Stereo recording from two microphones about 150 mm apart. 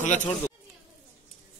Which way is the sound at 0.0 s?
55° left (ahead or behind).